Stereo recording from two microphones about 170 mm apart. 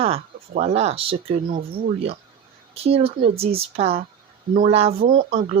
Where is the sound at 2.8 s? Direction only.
35° right (ahead or behind).